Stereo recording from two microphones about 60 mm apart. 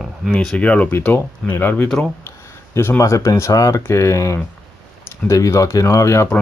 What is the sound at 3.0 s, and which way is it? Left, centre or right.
Speech, left.